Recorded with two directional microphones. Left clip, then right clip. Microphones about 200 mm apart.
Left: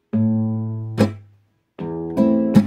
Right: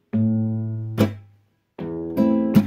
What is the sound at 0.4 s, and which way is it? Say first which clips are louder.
Music: left 2 dB; 30° left (ahead or behind).